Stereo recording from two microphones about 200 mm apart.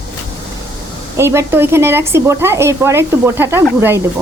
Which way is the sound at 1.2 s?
15° right (ahead or behind).